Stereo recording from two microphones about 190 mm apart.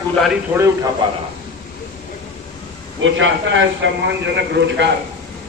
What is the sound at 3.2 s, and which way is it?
A man's voice, 80° right.